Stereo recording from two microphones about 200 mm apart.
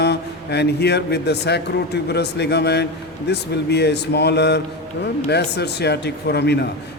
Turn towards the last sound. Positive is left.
turn(degrees=55)  # may be behind; listen again after turning